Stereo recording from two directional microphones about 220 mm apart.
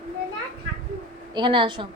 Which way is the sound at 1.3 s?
20° right (ahead or behind).